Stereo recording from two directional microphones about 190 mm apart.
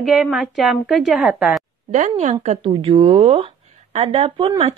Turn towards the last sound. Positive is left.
turn(degrees=-30)  # may be behind; listen again after turning